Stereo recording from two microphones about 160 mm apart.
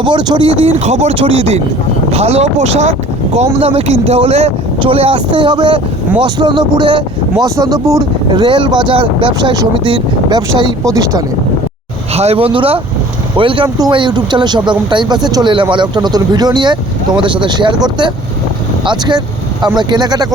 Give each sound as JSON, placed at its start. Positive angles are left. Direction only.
{"t": 0.0, "sound": "speech", "side_deg": -30}
{"t": 0.6, "sound": "speech", "side_deg": -40}
{"t": 12.1, "sound": "speech", "side_deg": -40}